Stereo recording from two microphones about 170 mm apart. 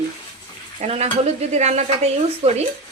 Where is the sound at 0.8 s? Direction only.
40° right (ahead or behind).